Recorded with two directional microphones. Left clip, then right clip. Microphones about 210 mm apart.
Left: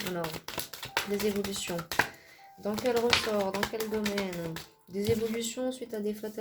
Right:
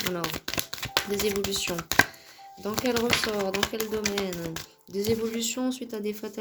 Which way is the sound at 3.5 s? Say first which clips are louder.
Right 3 dB; 45° right (ahead or behind).